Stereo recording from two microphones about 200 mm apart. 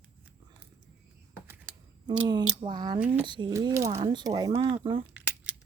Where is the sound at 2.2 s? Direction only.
20° right (ahead or behind).